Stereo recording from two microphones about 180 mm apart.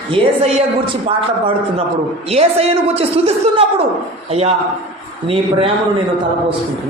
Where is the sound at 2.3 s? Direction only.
35° right (ahead or behind).